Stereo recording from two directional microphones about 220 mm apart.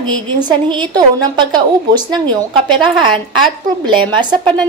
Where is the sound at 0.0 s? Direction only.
20° right (ahead or behind).